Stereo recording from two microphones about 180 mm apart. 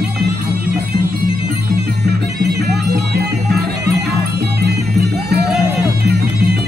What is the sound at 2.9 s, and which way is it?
Music, 60° right (ahead or behind).